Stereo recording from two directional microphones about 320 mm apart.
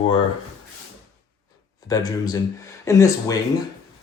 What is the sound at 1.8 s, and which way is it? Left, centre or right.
Speech, centre.